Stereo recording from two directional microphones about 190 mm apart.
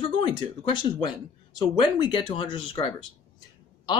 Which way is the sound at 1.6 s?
25° left (ahead or behind).